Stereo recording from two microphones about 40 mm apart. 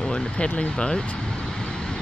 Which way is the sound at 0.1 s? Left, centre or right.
Left.